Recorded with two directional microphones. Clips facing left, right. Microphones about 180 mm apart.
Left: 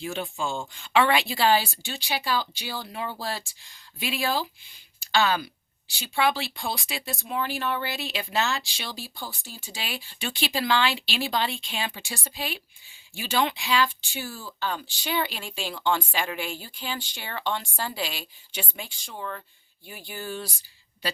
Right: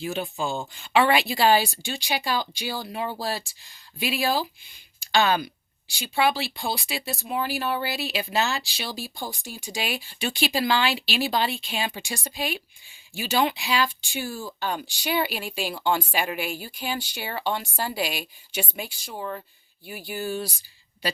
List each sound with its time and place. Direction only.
0.0 s speech: 5° right (ahead or behind)
4.9 s a sound: 15° right (ahead or behind)
5.9 s speech: 10° right (ahead or behind)
19.1 s speech: 20° right (ahead or behind)
19.8 s speech: 10° right (ahead or behind)